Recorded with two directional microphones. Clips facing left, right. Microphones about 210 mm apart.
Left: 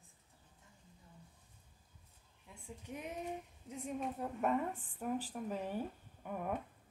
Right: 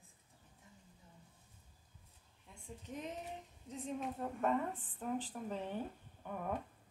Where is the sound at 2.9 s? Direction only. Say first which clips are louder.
Left 2 dB; 10° left (ahead or behind).